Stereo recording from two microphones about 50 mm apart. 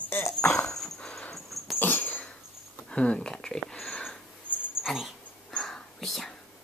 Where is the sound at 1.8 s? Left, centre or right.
Left.